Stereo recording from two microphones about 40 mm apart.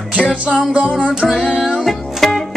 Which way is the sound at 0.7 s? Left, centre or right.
Right.